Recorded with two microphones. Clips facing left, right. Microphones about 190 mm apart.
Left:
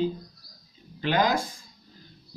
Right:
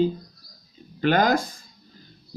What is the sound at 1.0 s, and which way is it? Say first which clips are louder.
Speech: right 4 dB; 50° right (ahead or behind).